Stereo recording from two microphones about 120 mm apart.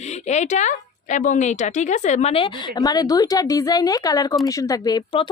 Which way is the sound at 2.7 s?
30° left (ahead or behind).